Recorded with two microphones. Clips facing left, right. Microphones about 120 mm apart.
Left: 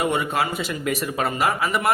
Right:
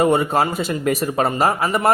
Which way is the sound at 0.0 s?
40° right (ahead or behind).